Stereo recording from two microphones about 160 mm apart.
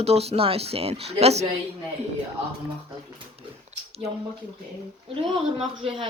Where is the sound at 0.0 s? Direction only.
40° right (ahead or behind).